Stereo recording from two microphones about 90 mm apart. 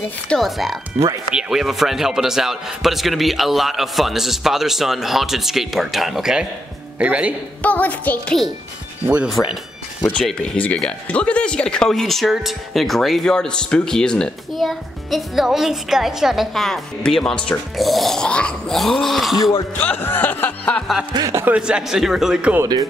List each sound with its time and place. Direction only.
0.4 s a man's voice: centre (ahead or behind)
0.9 s speech: 40° right (ahead or behind)
1.3 s a man's voice: 5° right (ahead or behind)
7.0 s a man's voice: 15° right (ahead or behind)
7.6 s speech: 20° left (ahead or behind)
9.0 s a man's voice: 15° right (ahead or behind)
10.5 s a man's voice: 15° left (ahead or behind); by 19.5 s centre (ahead or behind)
19.8 s music: 20° left (ahead or behind)
21.5 s a man's voice: 10° right (ahead or behind)